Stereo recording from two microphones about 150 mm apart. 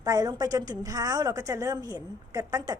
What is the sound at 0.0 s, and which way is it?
A woman's voice, 25° right (ahead or behind).